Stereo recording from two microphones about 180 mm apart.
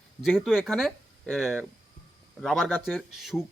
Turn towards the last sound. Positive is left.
turn(degrees=0)  # may be behind; listen again after turning